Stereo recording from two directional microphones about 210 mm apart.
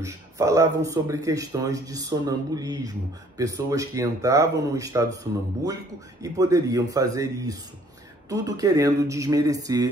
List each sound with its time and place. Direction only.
0.0 s speech: 15° right (ahead or behind)